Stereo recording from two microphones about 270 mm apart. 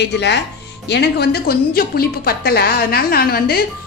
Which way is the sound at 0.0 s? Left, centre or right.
Left.